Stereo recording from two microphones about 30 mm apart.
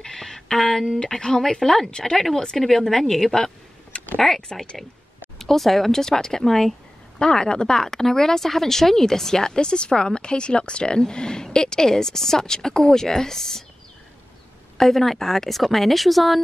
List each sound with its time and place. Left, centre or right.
0.0 s a sound: centre
0.6 s speech: centre
0.9 s speech: left
2.1 s speech: centre
3.9 s a sound: left
4.6 s speech: centre
7.2 s speech: left; by 13.7 s centre
14.8 s speech: centre